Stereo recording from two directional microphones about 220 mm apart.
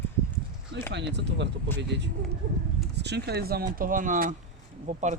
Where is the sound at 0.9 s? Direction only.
50° right (ahead or behind).